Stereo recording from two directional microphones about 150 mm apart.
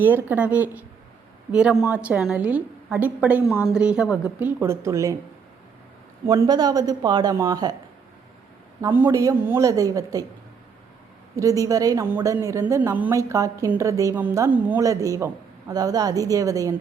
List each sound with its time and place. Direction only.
0.0 s a woman's voice: 10° right (ahead or behind)
6.3 s a woman's voice: 25° right (ahead or behind)
8.8 s a woman's voice: 15° right (ahead or behind)
11.3 s a woman's voice: 20° right (ahead or behind)